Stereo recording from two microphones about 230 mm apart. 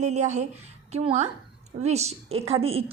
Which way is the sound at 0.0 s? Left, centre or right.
Right.